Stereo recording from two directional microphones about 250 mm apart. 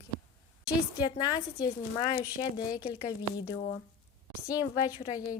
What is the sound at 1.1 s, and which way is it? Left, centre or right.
Speech, centre.